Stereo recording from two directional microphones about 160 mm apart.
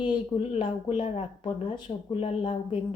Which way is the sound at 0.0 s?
30° left (ahead or behind).